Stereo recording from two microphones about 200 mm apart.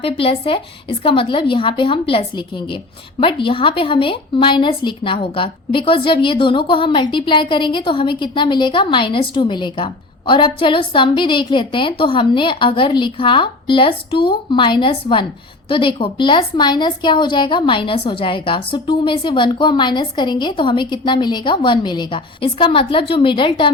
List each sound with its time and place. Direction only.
0.0 s a woman's voice: 30° left (ahead or behind)